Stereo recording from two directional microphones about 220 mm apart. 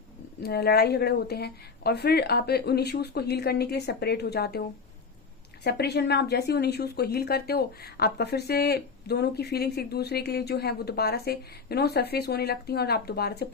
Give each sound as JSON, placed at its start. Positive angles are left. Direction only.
{"t": 0.4, "sound": "a woman's voice", "side_deg": 45}
{"t": 5.6, "sound": "a woman's voice", "side_deg": 45}